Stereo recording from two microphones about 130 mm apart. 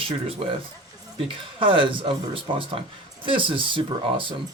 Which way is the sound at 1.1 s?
45° right (ahead or behind).